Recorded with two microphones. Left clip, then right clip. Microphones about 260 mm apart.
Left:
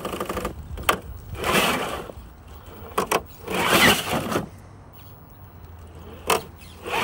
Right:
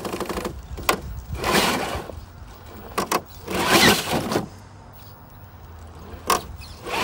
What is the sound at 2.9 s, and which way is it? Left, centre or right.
Vehicle, centre.